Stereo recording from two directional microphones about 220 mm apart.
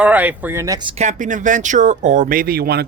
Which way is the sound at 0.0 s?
5° right (ahead or behind).